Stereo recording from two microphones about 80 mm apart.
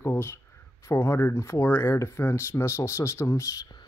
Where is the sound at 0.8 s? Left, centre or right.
Left.